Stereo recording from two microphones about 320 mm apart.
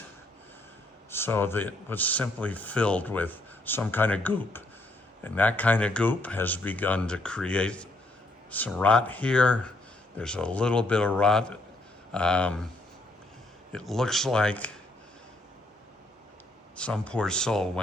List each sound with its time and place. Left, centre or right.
1.1 s speech: centre
13.7 s speech: centre
16.7 s speech: centre